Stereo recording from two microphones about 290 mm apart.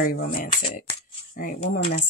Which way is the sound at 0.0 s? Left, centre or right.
Left.